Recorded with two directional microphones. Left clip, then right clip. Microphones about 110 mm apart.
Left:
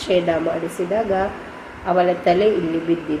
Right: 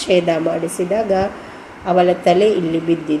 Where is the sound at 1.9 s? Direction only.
65° right (ahead or behind).